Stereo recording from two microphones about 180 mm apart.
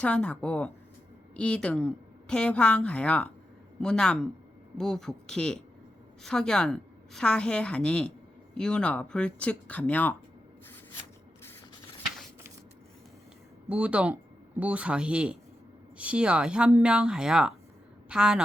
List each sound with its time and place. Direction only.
0.0 s a woman's voice: 5° left (ahead or behind)
13.7 s a woman's voice: 5° right (ahead or behind)